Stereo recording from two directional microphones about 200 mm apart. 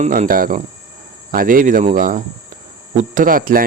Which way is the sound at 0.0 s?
40° right (ahead or behind).